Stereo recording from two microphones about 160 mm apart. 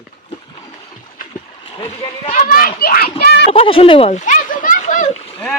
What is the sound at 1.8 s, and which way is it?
Speech, 40° left (ahead or behind).